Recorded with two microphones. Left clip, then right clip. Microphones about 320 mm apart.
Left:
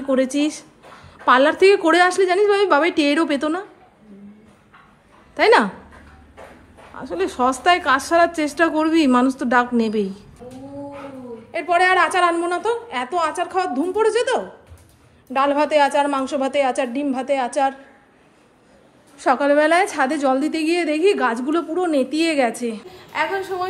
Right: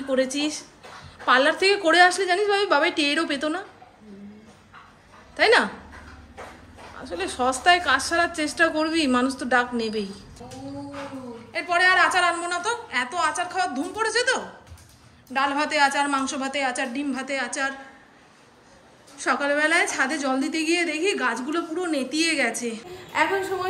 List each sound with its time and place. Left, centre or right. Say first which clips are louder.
0.1 s a woman's voice: left 4 dB; centre
5.3 s speech: left 4 dB; centre
7.0 s a woman's voice: left 6 dB; centre
11.5 s a woman's voice: left 3 dB; centre
19.1 s a woman's voice: left 7 dB; centre